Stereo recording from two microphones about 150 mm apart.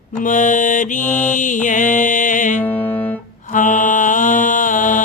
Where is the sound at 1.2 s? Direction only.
55° left (ahead or behind).